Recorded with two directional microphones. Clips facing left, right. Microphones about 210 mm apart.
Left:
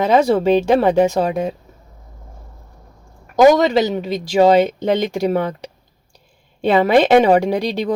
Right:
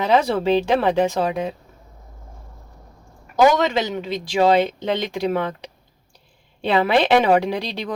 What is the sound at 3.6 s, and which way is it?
Speech, 40° left (ahead or behind).